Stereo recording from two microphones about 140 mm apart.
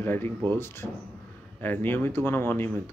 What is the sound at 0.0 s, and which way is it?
A man's voice, 15° left (ahead or behind).